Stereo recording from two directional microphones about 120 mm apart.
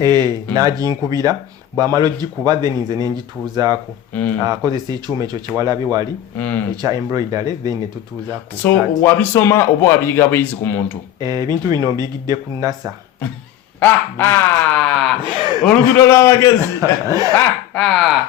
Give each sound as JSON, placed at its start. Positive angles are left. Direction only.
{"t": 0.0, "sound": "speech", "side_deg": -30}
{"t": 4.1, "sound": "quack", "side_deg": 10}
{"t": 4.4, "sound": "speech", "side_deg": -35}
{"t": 6.3, "sound": "quack", "side_deg": 15}
{"t": 6.8, "sound": "speech", "side_deg": -30}
{"t": 8.6, "sound": "speech", "side_deg": 20}
{"t": 11.2, "sound": "speech", "side_deg": -35}
{"t": 13.7, "sound": "quack", "side_deg": 15}
{"t": 14.8, "sound": "a sound", "side_deg": 5}
{"t": 15.2, "sound": "a sound", "side_deg": -40}
{"t": 16.0, "sound": "speech", "side_deg": 20}
{"t": 17.1, "sound": "speech", "side_deg": -30}
{"t": 17.7, "sound": "speech", "side_deg": 0}